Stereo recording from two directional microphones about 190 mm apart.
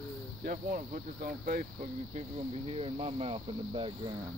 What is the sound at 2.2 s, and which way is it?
Speech, 30° right (ahead or behind).